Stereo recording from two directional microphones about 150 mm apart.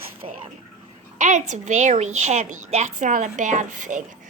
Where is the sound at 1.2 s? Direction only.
55° right (ahead or behind).